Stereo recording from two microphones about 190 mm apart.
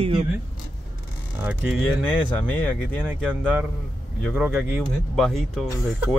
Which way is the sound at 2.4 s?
5° left (ahead or behind).